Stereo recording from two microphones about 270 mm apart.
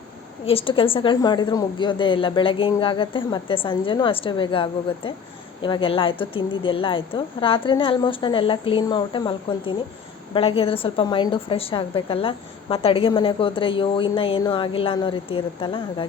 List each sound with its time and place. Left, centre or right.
0.4 s a woman's voice: centre